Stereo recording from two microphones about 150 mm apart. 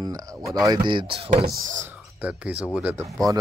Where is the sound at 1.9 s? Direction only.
10° right (ahead or behind).